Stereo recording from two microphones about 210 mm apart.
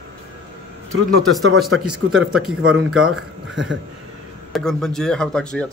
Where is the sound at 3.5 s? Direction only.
60° right (ahead or behind).